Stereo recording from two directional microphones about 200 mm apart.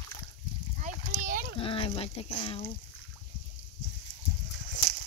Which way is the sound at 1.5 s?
25° left (ahead or behind).